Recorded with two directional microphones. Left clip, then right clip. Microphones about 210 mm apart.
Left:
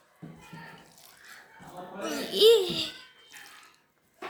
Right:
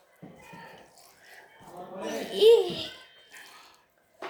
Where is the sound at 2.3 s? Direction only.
60° left (ahead or behind).